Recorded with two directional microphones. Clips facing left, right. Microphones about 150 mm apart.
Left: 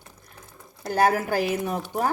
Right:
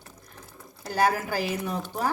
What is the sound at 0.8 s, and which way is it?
Speech, 55° left (ahead or behind).